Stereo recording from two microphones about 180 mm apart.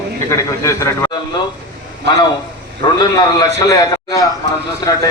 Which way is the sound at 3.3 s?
25° left (ahead or behind).